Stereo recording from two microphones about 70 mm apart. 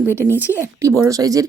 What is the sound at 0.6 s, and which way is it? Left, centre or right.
Speech, right.